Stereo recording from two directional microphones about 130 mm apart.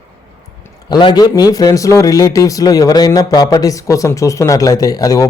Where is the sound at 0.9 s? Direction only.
35° left (ahead or behind).